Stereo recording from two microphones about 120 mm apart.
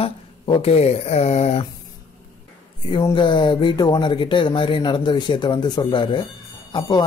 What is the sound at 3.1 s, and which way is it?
Speech, 40° left (ahead or behind).